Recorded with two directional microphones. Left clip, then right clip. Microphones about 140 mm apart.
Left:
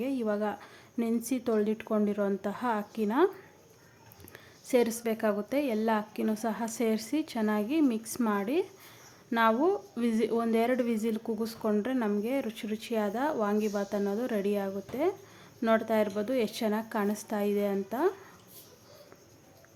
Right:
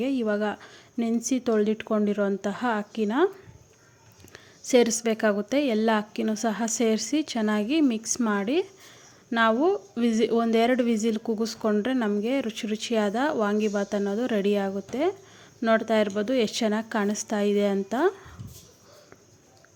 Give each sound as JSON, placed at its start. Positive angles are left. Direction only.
{"t": 0.0, "sound": "a woman's voice", "side_deg": -20}
{"t": 4.3, "sound": "a woman's voice", "side_deg": -20}